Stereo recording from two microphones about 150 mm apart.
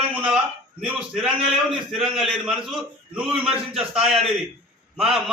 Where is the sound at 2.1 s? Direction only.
Centre (ahead or behind).